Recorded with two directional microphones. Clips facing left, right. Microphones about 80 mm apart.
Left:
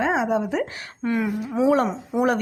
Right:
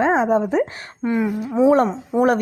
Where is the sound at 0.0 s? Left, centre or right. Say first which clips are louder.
Right 5 dB; right.